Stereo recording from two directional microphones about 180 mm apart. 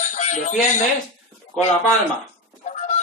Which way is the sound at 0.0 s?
40° left (ahead or behind).